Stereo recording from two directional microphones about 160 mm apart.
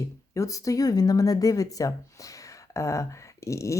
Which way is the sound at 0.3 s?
20° left (ahead or behind).